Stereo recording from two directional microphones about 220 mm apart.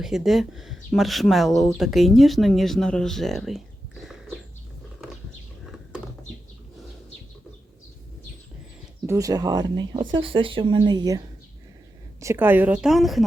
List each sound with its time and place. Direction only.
0.0 s speech: centre (ahead or behind)
9.0 s speech: 15° right (ahead or behind)
12.2 s a woman's voice: 10° right (ahead or behind)